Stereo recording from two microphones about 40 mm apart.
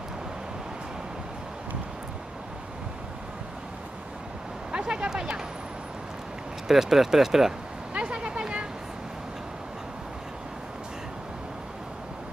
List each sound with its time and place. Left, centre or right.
4.7 s a sound: right
6.7 s speech: centre
7.9 s vehicle: right